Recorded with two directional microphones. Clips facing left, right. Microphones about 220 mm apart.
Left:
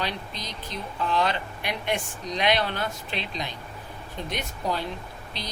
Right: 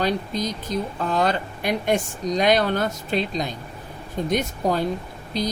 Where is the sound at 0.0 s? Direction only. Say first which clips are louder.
Right 9 dB; 45° right (ahead or behind).